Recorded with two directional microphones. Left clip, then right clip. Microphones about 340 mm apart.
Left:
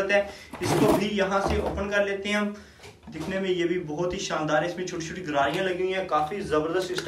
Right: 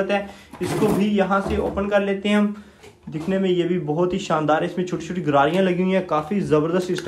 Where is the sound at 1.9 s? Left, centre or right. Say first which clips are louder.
Right 5 dB; centre.